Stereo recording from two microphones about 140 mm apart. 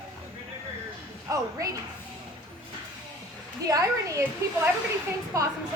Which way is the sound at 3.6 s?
25° right (ahead or behind).